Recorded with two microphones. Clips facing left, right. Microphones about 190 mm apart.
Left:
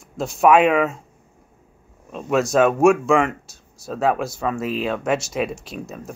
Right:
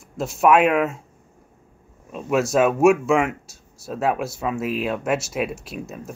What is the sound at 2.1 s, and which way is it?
Speech, 5° right (ahead or behind).